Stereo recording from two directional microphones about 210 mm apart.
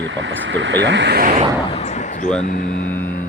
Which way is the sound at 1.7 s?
30° left (ahead or behind).